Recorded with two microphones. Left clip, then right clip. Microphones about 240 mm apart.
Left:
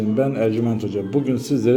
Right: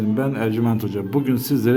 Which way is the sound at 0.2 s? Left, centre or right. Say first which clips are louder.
Left 5 dB; centre.